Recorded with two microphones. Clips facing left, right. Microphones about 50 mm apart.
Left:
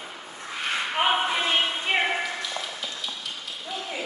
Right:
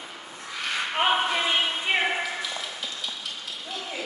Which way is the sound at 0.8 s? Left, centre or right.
Centre.